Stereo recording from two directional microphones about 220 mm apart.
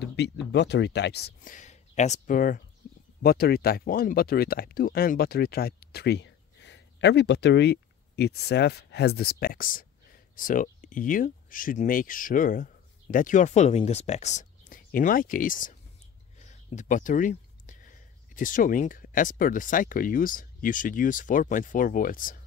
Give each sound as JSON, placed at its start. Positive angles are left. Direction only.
{"t": 0.0, "sound": "speech", "side_deg": 50}
{"t": 2.8, "sound": "a sound", "side_deg": 40}
{"t": 3.2, "sound": "speech", "side_deg": 45}